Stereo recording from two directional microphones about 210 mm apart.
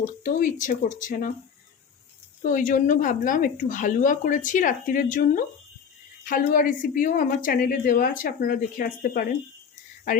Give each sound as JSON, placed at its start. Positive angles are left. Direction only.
{"t": 0.0, "sound": "speech", "side_deg": 40}
{"t": 2.4, "sound": "speech", "side_deg": 40}